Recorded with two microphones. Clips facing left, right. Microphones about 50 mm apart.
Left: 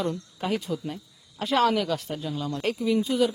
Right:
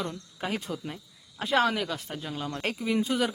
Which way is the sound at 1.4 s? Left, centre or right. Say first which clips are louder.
Left 3 dB; centre.